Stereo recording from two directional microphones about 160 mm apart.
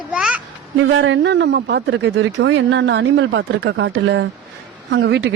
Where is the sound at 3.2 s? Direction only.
90° right.